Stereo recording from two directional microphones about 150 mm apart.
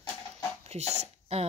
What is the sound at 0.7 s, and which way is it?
Speech, 45° right (ahead or behind).